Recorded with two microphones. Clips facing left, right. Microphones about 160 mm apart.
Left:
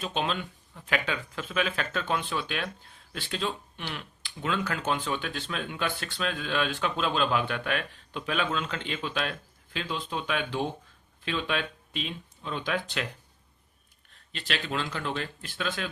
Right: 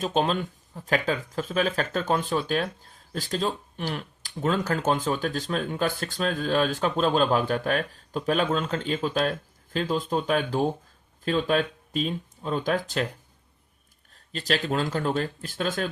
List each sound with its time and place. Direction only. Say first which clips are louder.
0.0 s speech: right 6 dB; 45° right (ahead or behind)
14.1 s speech: right 7 dB; 40° right (ahead or behind)